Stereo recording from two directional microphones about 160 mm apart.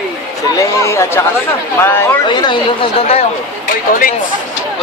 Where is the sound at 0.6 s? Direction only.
20° left (ahead or behind).